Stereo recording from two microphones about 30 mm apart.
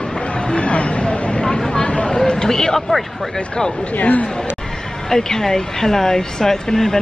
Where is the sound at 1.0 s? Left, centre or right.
Left.